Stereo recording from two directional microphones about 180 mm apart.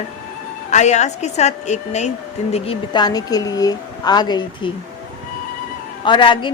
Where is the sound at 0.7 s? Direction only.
40° left (ahead or behind).